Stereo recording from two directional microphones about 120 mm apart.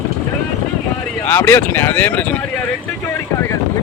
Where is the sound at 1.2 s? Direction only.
20° left (ahead or behind).